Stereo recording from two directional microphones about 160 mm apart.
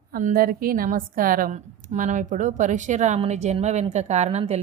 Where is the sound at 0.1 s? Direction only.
60° right (ahead or behind).